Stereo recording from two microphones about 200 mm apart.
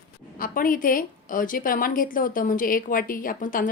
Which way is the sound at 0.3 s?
45° left (ahead or behind).